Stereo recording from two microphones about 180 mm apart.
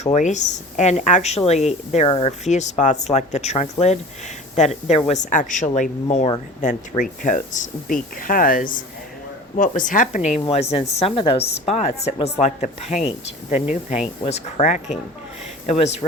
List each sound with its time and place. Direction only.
0.0 s speech: 40° left (ahead or behind)
14.3 s speech: 35° left (ahead or behind)